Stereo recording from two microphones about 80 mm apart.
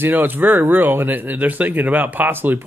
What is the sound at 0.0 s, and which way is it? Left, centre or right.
Speech, right.